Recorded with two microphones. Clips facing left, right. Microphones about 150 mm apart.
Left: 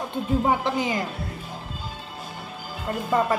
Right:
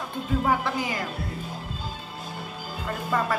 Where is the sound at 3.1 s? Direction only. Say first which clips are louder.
Left 4 dB; 25° left (ahead or behind).